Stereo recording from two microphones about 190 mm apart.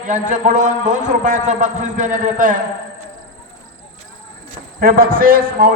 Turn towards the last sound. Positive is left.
turn(degrees=-50)  # may be behind; listen again after turning